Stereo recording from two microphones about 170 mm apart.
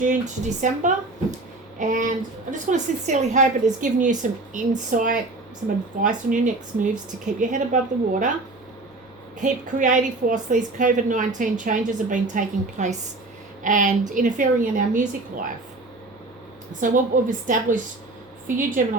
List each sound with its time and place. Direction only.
0.0 s a woman's voice: 45° right (ahead or behind)
9.4 s a woman's voice: 45° right (ahead or behind)
16.8 s a woman's voice: 50° right (ahead or behind)